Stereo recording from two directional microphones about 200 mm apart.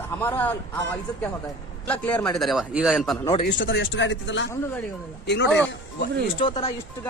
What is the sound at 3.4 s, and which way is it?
Speech, 65° left (ahead or behind).